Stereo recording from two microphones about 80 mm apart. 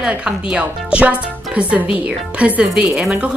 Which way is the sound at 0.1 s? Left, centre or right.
Centre.